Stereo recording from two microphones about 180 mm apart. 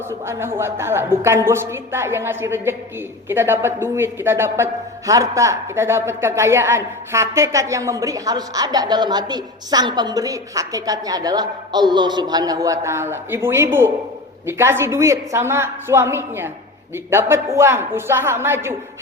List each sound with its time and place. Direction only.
0.1 s a man's voice: 15° right (ahead or behind)